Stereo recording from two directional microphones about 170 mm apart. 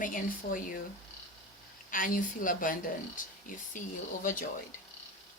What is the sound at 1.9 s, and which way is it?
A woman's voice, 55° left (ahead or behind).